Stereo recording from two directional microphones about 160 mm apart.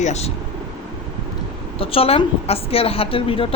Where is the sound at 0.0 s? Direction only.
45° left (ahead or behind).